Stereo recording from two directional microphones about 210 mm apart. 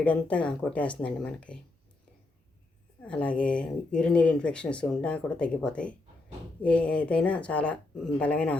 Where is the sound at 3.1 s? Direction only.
5° left (ahead or behind).